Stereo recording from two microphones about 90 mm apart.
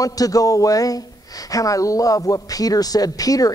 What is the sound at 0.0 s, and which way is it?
Speech, 40° left (ahead or behind).